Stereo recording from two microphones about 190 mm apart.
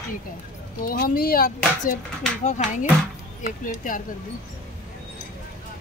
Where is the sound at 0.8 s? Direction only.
50° left (ahead or behind).